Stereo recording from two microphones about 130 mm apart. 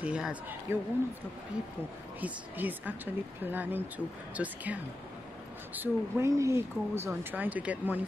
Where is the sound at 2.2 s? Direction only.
15° right (ahead or behind).